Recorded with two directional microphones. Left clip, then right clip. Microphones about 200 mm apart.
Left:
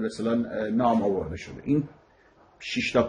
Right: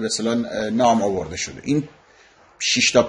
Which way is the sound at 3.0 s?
50° right (ahead or behind).